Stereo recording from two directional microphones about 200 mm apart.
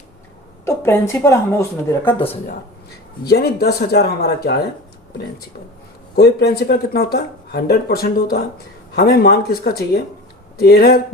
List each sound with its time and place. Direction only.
0.6 s speech: 15° left (ahead or behind)
3.2 s speech: 55° left (ahead or behind)
6.1 s speech: 50° left (ahead or behind)